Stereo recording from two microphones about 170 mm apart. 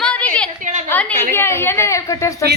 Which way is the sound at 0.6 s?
45° right (ahead or behind).